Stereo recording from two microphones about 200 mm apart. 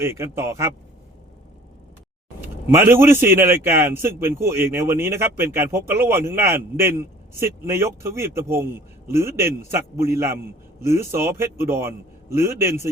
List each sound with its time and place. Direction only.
0.0 s a man's voice: 15° right (ahead or behind)
2.6 s a man's voice: 10° right (ahead or behind)